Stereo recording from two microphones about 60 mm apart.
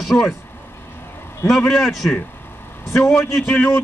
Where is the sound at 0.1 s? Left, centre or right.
Centre.